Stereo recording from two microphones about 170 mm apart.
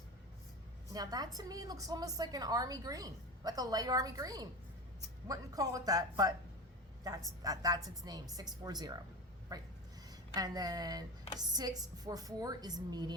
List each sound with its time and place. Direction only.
0.9 s a woman's voice: 20° right (ahead or behind)